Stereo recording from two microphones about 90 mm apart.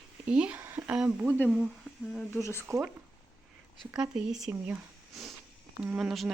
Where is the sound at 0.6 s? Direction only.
25° right (ahead or behind).